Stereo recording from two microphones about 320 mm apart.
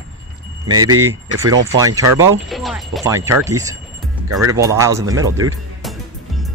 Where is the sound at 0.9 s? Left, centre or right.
Right.